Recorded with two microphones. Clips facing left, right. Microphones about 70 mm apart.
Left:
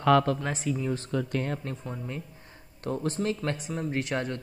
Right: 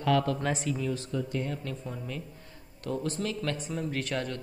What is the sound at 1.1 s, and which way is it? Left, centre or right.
Speech, left.